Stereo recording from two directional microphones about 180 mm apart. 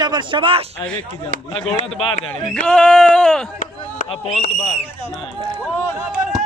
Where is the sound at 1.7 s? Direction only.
35° left (ahead or behind).